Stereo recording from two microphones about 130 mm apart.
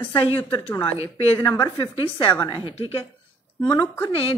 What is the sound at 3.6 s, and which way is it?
Speech, 35° left (ahead or behind).